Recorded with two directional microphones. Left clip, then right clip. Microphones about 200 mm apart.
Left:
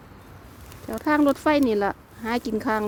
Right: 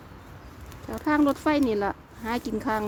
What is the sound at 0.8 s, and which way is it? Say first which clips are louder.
Speech: left 3 dB; 35° left (ahead or behind).